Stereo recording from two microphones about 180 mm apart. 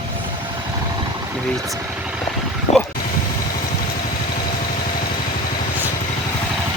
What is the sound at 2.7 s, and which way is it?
Vehicle, 40° left (ahead or behind).